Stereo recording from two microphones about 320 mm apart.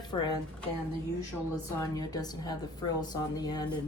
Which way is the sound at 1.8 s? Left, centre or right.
Centre.